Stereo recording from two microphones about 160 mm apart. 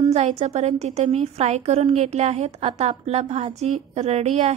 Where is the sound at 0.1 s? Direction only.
40° right (ahead or behind).